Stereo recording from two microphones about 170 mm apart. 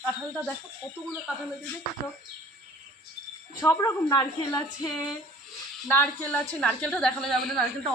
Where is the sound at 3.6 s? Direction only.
20° left (ahead or behind).